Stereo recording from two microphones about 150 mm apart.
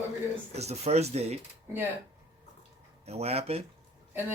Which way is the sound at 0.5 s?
45° right (ahead or behind).